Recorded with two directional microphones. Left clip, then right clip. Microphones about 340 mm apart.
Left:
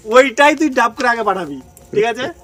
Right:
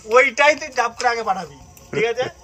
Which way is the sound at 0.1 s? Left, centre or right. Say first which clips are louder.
Left 4 dB; left.